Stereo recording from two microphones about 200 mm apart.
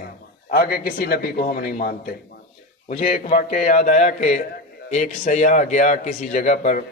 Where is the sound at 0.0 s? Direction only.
50° left (ahead or behind).